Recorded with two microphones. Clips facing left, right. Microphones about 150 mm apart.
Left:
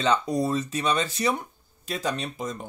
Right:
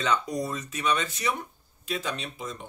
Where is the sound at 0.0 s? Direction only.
30° left (ahead or behind).